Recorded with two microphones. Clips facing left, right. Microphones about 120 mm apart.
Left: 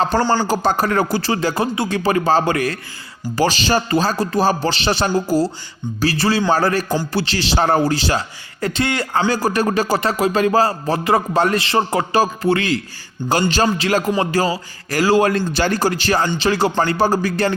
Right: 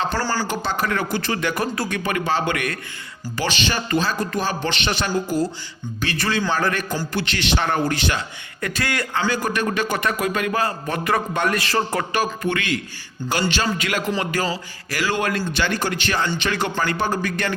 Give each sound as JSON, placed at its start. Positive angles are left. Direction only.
{"t": 0.2, "sound": "speech", "side_deg": 20}
{"t": 0.4, "sound": "speech", "side_deg": 40}
{"t": 9.1, "sound": "speech", "side_deg": 35}